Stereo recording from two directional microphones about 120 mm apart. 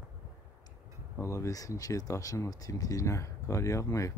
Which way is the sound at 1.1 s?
25° left (ahead or behind).